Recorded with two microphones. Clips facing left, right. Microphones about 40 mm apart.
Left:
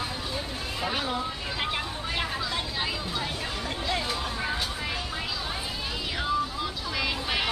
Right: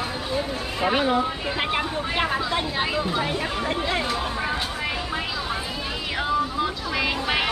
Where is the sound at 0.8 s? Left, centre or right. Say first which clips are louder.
Right 9 dB; right.